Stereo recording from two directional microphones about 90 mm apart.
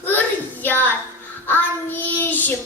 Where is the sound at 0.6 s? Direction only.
20° left (ahead or behind).